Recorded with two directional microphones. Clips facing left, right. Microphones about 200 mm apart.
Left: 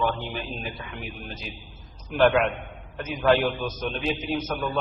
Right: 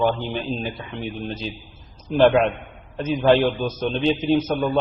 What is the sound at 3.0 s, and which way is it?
A man's voice, 25° right (ahead or behind).